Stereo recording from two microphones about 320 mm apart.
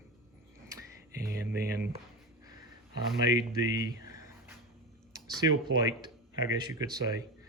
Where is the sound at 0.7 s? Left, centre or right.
Centre.